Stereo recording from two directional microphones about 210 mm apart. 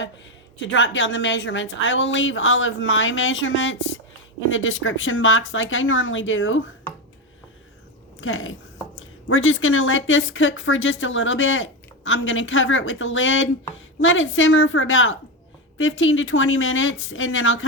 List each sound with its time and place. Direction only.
0.6 s a woman's voice: 60° left (ahead or behind)
8.2 s a woman's voice: 70° left (ahead or behind)